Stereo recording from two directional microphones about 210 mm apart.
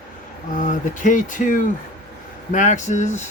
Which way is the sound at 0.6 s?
40° left (ahead or behind).